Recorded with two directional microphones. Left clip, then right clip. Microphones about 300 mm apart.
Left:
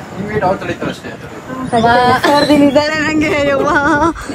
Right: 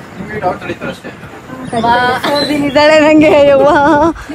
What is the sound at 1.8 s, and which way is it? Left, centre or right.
Speech, left.